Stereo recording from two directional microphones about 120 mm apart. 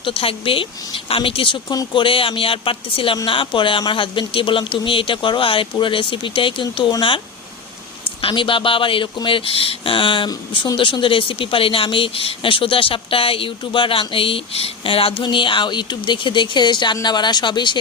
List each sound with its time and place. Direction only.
0.0 s speech: 50° left (ahead or behind)
8.2 s speech: 45° left (ahead or behind)